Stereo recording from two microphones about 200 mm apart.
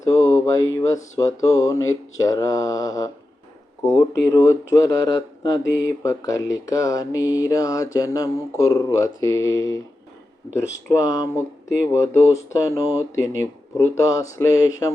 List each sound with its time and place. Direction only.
0.8 s speech: 15° left (ahead or behind)
10.8 s speech: 15° left (ahead or behind)